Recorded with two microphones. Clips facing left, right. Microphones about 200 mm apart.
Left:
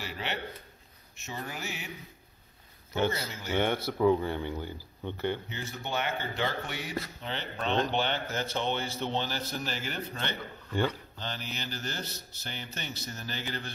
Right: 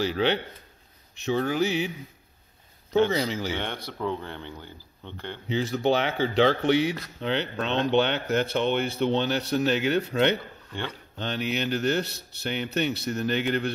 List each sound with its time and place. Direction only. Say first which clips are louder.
0.0 s speech: right 12 dB; 90° right
3.1 s speech: right 8 dB; 90° right
3.5 s speech: left 5 dB; 10° left (ahead or behind)
5.5 s speech: right 12 dB; 85° right; by 13.7 s 65° right (ahead or behind)